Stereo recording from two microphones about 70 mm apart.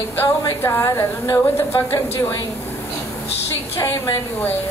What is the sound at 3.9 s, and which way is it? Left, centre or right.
Speech, left.